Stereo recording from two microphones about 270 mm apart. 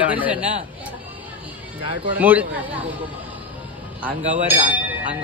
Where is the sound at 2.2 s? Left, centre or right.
Centre.